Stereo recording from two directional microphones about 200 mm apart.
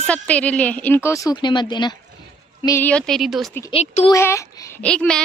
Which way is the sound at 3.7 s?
30° left (ahead or behind).